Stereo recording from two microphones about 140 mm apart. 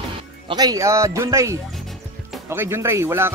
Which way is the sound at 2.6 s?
20° right (ahead or behind).